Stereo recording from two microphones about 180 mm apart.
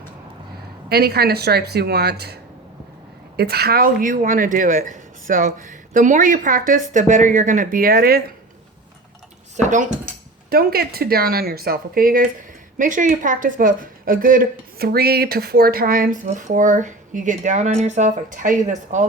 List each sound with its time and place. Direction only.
0.9 s speech: 60° right (ahead or behind)
9.6 s speech: 40° right (ahead or behind)
10.5 s speech: 55° right (ahead or behind)